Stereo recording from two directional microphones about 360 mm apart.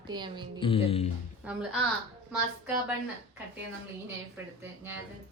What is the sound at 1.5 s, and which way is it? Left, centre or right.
Speech, centre.